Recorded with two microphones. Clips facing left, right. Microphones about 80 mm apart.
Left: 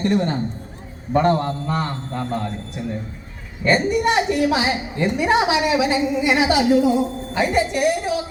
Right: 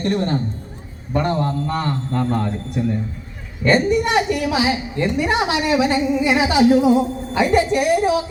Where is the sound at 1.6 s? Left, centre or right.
Centre.